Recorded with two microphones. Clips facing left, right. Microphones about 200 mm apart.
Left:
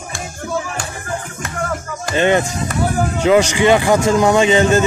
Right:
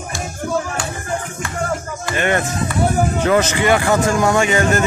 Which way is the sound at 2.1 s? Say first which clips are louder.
Left 4 dB; 20° left (ahead or behind).